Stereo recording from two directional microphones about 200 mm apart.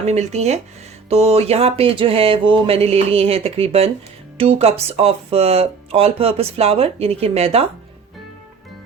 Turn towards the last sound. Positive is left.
turn(degrees=-30)  # may be behind; listen again after turning